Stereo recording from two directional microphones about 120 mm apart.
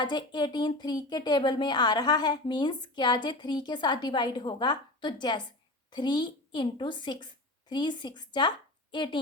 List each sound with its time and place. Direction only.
0.0 s a woman's voice: 40° left (ahead or behind)